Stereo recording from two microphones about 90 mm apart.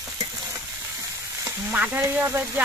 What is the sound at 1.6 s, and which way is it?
Stir, 20° right (ahead or behind).